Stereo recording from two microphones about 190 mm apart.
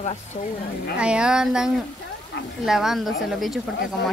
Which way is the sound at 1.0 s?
5° right (ahead or behind).